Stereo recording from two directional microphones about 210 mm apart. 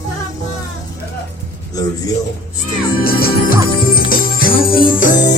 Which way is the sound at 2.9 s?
45° left (ahead or behind).